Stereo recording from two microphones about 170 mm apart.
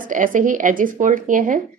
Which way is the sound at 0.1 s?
50° right (ahead or behind).